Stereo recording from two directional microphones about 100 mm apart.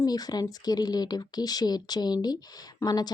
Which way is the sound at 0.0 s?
40° left (ahead or behind).